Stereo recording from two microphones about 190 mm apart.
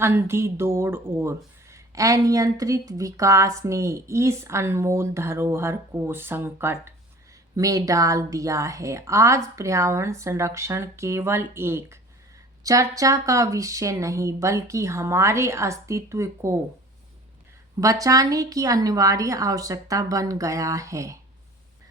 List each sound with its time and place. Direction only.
0.0 s speech: 15° right (ahead or behind)
17.7 s speech: 20° right (ahead or behind)